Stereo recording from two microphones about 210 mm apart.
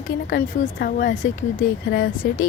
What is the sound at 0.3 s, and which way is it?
Speech, 45° left (ahead or behind).